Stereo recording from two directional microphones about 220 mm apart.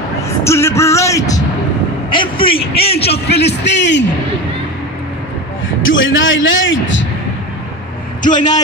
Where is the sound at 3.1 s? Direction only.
50° left (ahead or behind).